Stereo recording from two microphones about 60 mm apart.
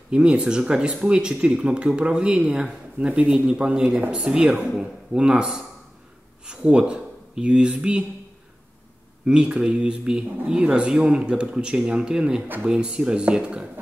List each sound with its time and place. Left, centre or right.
0.1 s speech: centre
9.2 s speech: centre